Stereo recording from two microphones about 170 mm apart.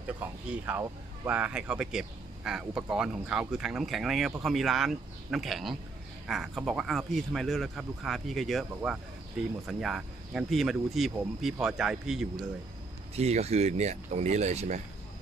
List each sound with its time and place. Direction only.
0.2 s speech: 10° right (ahead or behind)
13.1 s speech: 40° right (ahead or behind)